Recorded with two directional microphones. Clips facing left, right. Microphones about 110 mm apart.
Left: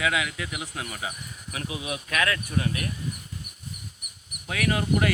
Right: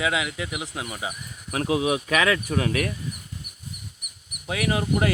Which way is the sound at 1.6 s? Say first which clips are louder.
Right 11 dB; 90° right.